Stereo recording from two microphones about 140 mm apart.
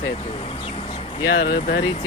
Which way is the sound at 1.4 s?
90° left.